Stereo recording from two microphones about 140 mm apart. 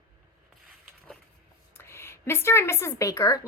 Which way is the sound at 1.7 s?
20° left (ahead or behind).